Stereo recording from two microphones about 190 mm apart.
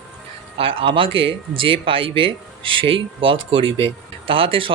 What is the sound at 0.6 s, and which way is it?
Speech, 30° right (ahead or behind).